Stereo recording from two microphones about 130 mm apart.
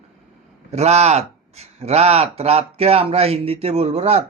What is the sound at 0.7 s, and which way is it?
Speech, 55° right (ahead or behind).